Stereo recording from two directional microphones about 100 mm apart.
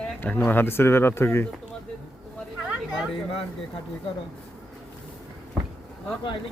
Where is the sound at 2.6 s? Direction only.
5° right (ahead or behind).